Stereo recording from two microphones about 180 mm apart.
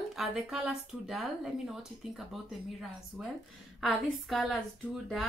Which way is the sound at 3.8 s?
Centre (ahead or behind).